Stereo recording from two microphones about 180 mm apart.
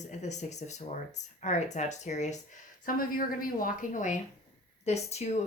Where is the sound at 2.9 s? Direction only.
50° left (ahead or behind).